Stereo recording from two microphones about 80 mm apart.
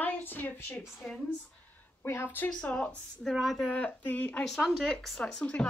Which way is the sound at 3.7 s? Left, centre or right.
Left.